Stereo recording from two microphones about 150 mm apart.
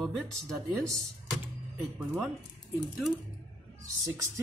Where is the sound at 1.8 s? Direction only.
Centre (ahead or behind).